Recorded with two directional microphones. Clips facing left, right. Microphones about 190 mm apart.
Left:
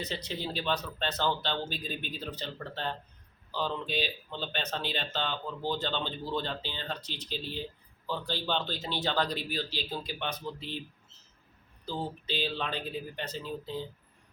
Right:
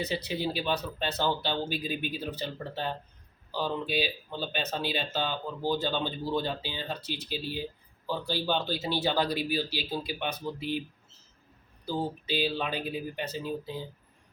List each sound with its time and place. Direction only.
0.0 s speech: 10° right (ahead or behind)
11.9 s speech: 10° right (ahead or behind)